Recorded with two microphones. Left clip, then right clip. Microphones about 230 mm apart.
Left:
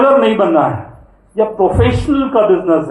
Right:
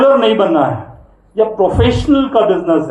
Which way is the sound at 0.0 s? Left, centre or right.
Right.